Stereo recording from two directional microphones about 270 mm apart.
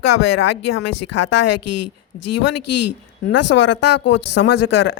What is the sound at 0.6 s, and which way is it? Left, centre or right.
Speech, left.